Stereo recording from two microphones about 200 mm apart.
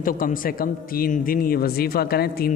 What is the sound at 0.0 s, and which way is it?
Speech, 45° left (ahead or behind).